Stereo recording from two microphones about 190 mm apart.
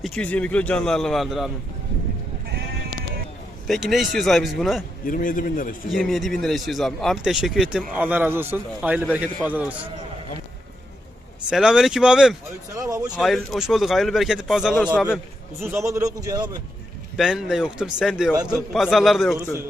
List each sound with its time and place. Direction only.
0.0 s speech: 5° left (ahead or behind)
3.7 s speech: centre (ahead or behind)
5.0 s a man's voice: 45° left (ahead or behind)
5.9 s a man's voice: centre (ahead or behind)
11.4 s speech: 5° right (ahead or behind)
12.7 s a man's voice: 15° right (ahead or behind)
13.1 s a man's voice: centre (ahead or behind); by 16.6 s 20° right (ahead or behind)
17.2 s speech: centre (ahead or behind)